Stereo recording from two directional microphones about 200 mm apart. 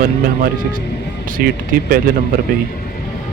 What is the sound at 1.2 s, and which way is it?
Speech, 45° right (ahead or behind).